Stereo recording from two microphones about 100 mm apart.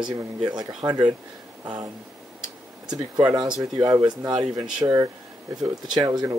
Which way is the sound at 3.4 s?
50° right (ahead or behind).